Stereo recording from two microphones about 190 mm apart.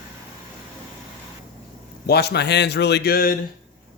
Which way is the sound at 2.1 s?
55° left (ahead or behind).